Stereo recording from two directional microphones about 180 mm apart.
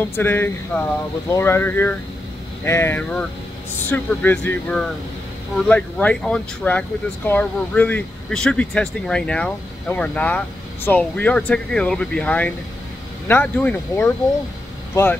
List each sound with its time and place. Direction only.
0.1 s speech: 15° left (ahead or behind)